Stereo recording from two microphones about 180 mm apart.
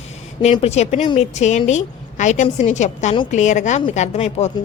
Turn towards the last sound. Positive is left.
turn(degrees=35)  # may be behind; listen again after turning